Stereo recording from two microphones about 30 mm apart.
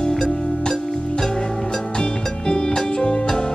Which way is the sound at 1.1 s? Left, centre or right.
Left.